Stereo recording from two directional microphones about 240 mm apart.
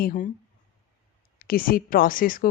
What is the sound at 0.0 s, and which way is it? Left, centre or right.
Speech, left.